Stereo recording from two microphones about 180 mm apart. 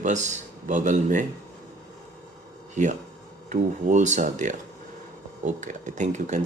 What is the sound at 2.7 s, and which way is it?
Speech, 45° right (ahead or behind).